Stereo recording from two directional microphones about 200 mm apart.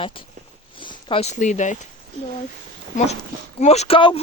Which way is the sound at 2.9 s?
35° left (ahead or behind).